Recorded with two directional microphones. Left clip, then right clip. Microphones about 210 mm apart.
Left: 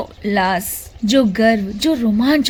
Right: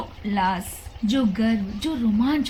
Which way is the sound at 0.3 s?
55° left (ahead or behind).